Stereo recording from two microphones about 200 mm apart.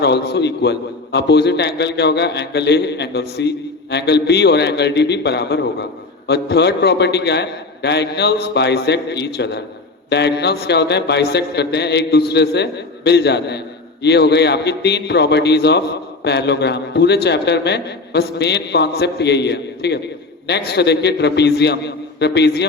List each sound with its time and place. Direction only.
0.0 s a man's voice: 55° left (ahead or behind)